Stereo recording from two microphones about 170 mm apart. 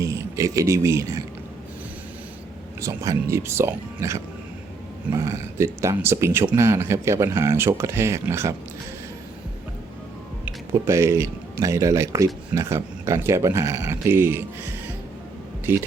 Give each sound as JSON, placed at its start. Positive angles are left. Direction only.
{"t": 0.0, "sound": "speech", "side_deg": -20}
{"t": 2.8, "sound": "speech", "side_deg": -20}
{"t": 10.4, "sound": "speech", "side_deg": -15}
{"t": 15.7, "sound": "speech", "side_deg": -15}